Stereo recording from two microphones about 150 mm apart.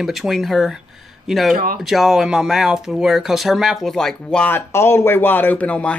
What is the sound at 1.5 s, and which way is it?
Speech, 70° right (ahead or behind).